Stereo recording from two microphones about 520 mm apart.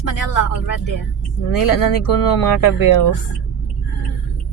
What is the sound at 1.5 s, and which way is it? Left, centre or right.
Speech, left.